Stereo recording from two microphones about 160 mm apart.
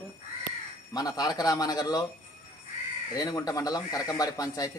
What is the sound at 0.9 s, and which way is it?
A man's voice, 25° left (ahead or behind).